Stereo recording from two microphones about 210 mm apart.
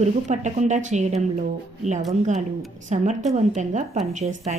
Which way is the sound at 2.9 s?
35° right (ahead or behind).